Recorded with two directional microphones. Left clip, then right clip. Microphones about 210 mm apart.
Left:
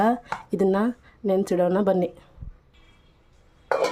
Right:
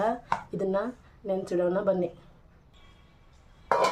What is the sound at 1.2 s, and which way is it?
Speech, 50° left (ahead or behind).